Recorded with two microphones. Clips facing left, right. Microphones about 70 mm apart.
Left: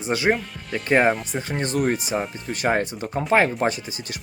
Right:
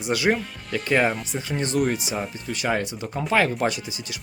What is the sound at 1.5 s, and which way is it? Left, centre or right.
Speech, left.